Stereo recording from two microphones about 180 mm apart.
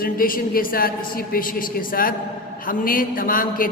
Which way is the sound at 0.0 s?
55° left (ahead or behind).